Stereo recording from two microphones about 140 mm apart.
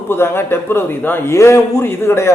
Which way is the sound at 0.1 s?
15° left (ahead or behind).